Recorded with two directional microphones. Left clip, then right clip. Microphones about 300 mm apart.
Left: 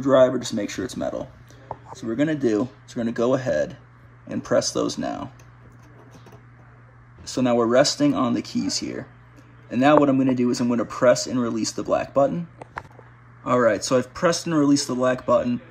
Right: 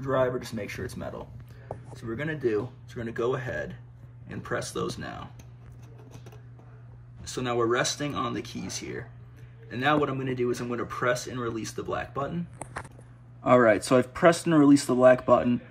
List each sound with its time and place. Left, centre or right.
0.0 s speech: centre
7.2 s speech: centre
13.4 s speech: centre